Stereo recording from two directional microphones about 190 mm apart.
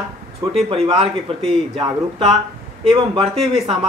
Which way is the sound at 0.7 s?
30° right (ahead or behind).